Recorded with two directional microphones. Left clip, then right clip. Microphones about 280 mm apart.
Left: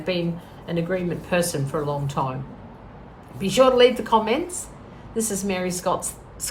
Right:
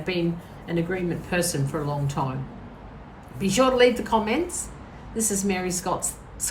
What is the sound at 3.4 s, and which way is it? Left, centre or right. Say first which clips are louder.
A woman's voice: left 3 dB; centre.